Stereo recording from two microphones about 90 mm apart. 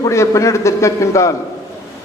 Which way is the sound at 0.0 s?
35° left (ahead or behind).